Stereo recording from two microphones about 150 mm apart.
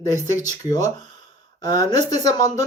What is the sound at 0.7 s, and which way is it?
Speech, 25° left (ahead or behind).